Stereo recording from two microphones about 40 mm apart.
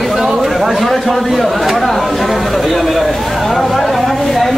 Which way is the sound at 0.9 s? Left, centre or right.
Centre.